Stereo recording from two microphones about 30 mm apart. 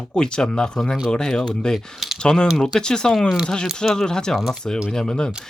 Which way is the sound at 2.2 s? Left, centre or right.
Left.